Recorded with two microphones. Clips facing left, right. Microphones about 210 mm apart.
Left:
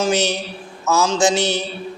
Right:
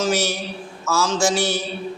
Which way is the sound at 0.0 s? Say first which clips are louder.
Left 2 dB; 20° left (ahead or behind).